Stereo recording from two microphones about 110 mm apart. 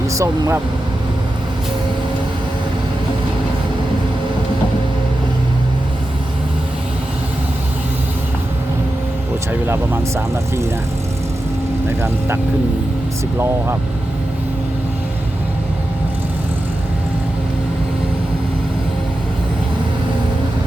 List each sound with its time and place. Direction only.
0.1 s speech: 30° right (ahead or behind)
9.5 s speech: 20° right (ahead or behind)
11.9 s speech: 25° right (ahead or behind)